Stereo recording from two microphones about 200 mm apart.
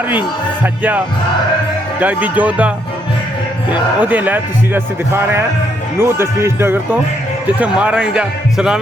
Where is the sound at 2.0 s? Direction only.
5° right (ahead or behind).